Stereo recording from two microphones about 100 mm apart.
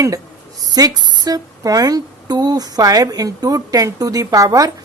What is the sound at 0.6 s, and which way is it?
Speech, 40° right (ahead or behind).